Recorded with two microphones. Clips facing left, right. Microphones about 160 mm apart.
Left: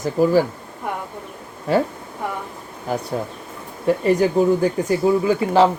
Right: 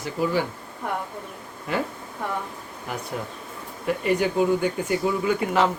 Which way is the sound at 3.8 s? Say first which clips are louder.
Left 6 dB; 35° left (ahead or behind).